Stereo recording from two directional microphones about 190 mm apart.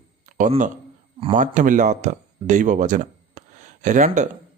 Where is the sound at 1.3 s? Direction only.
45° right (ahead or behind).